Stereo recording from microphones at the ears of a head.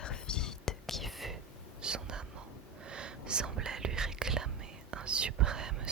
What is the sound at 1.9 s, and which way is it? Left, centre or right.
Whispering, right.